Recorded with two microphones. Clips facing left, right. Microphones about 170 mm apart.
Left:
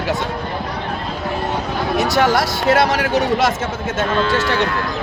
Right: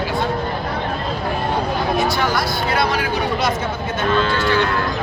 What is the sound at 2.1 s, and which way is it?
Speech, 85° left.